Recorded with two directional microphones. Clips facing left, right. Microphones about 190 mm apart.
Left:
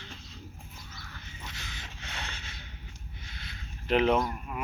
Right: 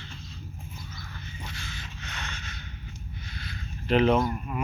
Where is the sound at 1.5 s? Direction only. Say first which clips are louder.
Right 4 dB; 20° left (ahead or behind).